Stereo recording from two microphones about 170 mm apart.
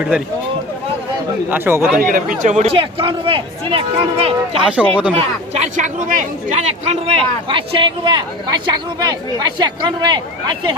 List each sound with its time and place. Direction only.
1.5 s speech: 10° right (ahead or behind)
2.0 s speech: 55° right (ahead or behind); by 4.6 s 35° right (ahead or behind)
4.7 s speech: 5° right (ahead or behind)
5.1 s speech: 45° right (ahead or behind); by 10.8 s 25° right (ahead or behind)